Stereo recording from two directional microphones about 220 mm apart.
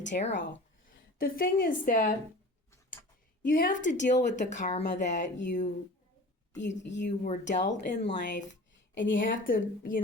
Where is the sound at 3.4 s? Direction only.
40° left (ahead or behind).